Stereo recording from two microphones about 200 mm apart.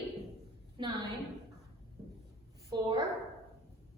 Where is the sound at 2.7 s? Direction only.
20° right (ahead or behind).